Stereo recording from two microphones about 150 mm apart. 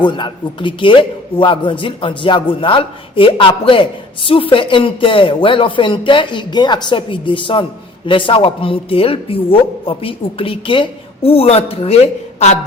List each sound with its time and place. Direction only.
0.0 s a man's voice: 30° left (ahead or behind)